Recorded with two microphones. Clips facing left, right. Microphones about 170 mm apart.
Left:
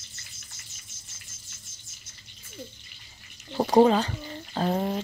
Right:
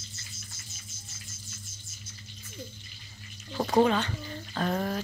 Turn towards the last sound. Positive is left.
turn(degrees=25)  # may be behind; listen again after turning